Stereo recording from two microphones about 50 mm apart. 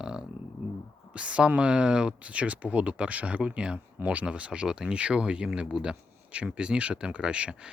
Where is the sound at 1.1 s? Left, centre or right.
Right.